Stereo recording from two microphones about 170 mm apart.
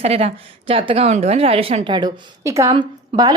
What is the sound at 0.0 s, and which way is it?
A woman's voice, 40° right (ahead or behind).